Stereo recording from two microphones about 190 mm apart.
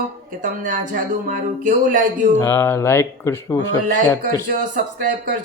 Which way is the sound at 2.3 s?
15° left (ahead or behind).